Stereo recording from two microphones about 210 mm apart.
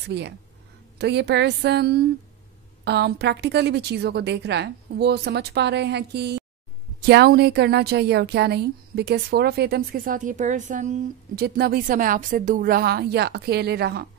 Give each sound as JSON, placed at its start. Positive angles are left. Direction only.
{"t": 0.1, "sound": "a woman's voice", "side_deg": -55}